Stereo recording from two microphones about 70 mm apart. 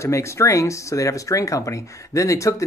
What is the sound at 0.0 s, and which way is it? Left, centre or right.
Speech, left.